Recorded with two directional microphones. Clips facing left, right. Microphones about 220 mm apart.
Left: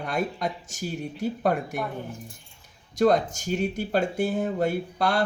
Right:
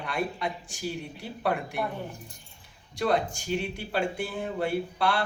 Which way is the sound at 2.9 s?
45° left (ahead or behind).